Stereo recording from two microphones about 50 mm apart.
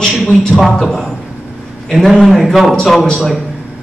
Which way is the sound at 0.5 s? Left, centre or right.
Centre.